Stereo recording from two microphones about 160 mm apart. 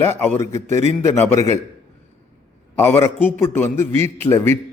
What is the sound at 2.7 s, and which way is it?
A man's voice, 15° left (ahead or behind).